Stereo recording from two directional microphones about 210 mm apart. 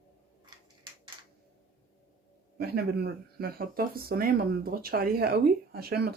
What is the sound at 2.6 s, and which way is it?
Speech, 50° right (ahead or behind).